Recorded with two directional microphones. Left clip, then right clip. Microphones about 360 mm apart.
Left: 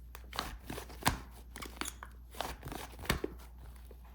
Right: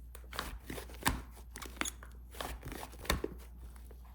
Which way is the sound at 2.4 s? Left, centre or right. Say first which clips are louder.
Left 2 dB; centre.